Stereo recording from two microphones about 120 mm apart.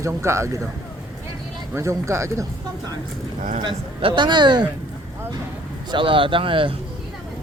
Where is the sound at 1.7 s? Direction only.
25° right (ahead or behind).